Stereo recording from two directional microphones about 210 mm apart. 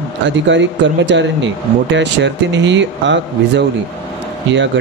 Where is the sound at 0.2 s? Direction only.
60° right (ahead or behind).